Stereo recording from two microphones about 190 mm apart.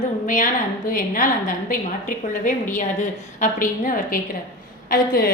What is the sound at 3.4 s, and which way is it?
A woman's voice, 45° left (ahead or behind).